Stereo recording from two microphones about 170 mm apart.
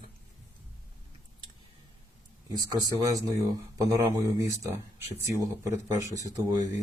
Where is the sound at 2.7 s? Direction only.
20° right (ahead or behind).